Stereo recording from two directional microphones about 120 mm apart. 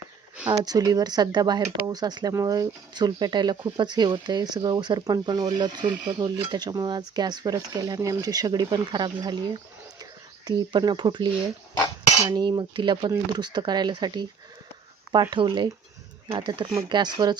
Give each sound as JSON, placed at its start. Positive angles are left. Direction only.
{"t": 0.6, "sound": "speech", "side_deg": -35}